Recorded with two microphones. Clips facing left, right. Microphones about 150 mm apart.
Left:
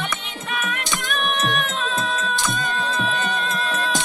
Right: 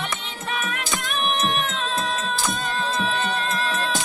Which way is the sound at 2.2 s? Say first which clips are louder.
Left 1 dB; 35° right (ahead or behind).